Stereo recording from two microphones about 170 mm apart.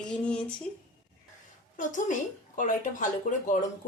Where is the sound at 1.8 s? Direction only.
50° left (ahead or behind).